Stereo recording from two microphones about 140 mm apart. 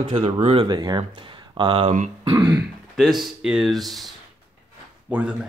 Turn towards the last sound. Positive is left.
turn(degrees=-10)  # may be behind; listen again after turning